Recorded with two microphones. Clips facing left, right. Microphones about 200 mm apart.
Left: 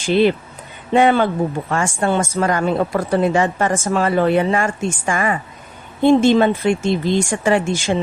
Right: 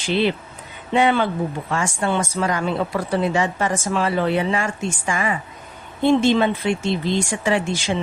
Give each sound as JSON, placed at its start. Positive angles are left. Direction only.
{"t": 0.0, "sound": "a woman's voice", "side_deg": 50}